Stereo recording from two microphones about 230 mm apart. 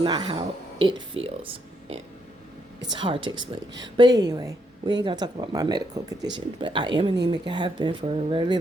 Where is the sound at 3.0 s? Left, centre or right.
Right.